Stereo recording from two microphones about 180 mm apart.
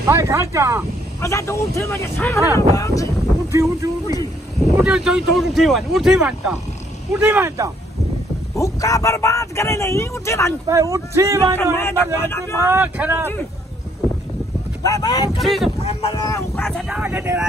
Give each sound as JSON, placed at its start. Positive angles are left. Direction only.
{"t": 0.0, "sound": "speech", "side_deg": -15}
{"t": 1.2, "sound": "speech", "side_deg": 15}
{"t": 3.5, "sound": "speech", "side_deg": -15}
{"t": 4.8, "sound": "speech", "side_deg": -5}
{"t": 8.5, "sound": "speech", "side_deg": 20}
{"t": 10.7, "sound": "speech", "side_deg": -15}
{"t": 11.5, "sound": "speech", "side_deg": 15}
{"t": 12.5, "sound": "speech", "side_deg": -10}
{"t": 14.8, "sound": "speech", "side_deg": 20}
{"t": 15.4, "sound": "speech", "side_deg": 0}
{"t": 15.8, "sound": "speech", "side_deg": 35}
{"t": 16.1, "sound": "speech", "side_deg": 20}
{"t": 16.5, "sound": "speech", "side_deg": 5}